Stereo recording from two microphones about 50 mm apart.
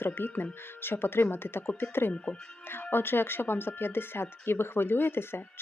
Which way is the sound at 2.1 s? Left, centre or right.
Left.